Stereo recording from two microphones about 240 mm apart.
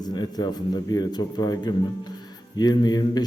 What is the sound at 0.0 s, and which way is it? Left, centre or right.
A man's voice, centre.